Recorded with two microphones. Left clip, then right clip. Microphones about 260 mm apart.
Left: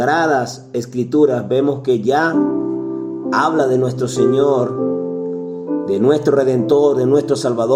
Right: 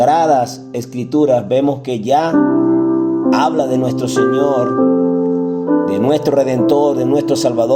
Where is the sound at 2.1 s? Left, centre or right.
Right.